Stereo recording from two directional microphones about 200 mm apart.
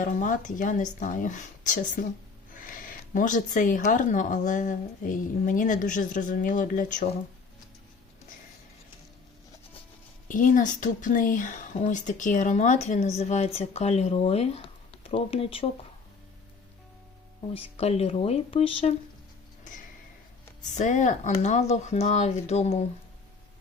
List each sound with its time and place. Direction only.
0.0 s speech: 40° left (ahead or behind)
10.2 s speech: 40° left (ahead or behind)
17.5 s speech: 30° left (ahead or behind)
20.7 s speech: 35° left (ahead or behind)